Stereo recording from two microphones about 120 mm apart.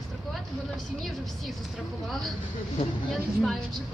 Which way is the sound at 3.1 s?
Centre (ahead or behind).